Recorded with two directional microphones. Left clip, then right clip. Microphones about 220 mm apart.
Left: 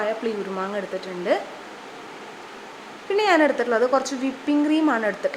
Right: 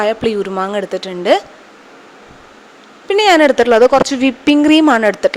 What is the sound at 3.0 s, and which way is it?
Speech, 40° right (ahead or behind).